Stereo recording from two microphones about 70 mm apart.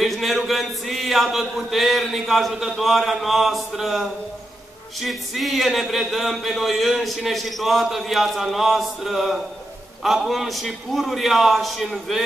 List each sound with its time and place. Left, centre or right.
0.0 s chant: centre